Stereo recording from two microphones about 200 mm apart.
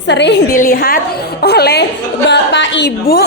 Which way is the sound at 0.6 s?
45° left (ahead or behind).